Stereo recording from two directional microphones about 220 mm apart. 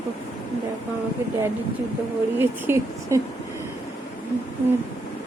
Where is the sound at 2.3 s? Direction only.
10° right (ahead or behind).